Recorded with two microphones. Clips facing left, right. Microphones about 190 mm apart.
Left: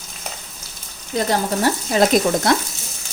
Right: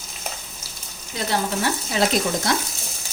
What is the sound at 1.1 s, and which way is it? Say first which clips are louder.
Speech: left 5 dB; 45° left (ahead or behind).